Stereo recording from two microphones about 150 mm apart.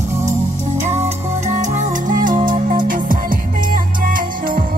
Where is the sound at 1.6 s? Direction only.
60° right (ahead or behind).